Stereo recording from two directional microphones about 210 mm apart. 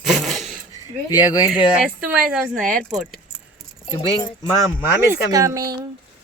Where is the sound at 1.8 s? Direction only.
5° right (ahead or behind).